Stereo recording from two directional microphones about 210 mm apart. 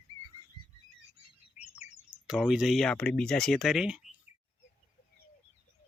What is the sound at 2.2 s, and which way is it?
Speech, 5° right (ahead or behind).